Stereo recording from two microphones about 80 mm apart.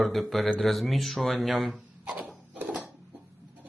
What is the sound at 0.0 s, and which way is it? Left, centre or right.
Speech, centre.